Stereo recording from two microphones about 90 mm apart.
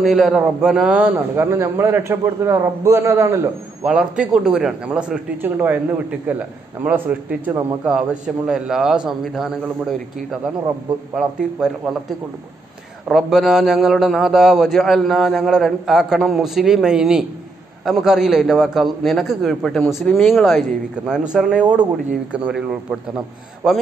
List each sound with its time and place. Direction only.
0.0 s a man's voice: 5° right (ahead or behind)
1.3 s a man's voice: 30° right (ahead or behind)
3.8 s a man's voice: 10° right (ahead or behind)
11.1 s a man's voice: 5° right (ahead or behind)
13.1 s a man's voice: 5° right (ahead or behind)